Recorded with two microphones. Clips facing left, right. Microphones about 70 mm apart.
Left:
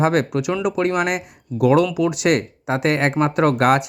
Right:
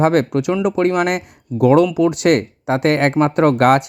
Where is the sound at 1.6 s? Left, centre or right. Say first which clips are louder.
Right 4 dB; right.